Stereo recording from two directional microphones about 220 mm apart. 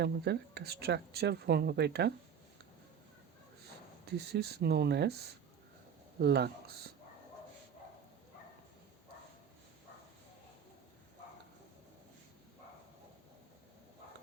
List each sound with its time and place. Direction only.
0.0 s speech: 50° right (ahead or behind)
4.0 s speech: 50° right (ahead or behind)